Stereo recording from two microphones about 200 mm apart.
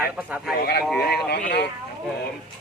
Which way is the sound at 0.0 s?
5° right (ahead or behind).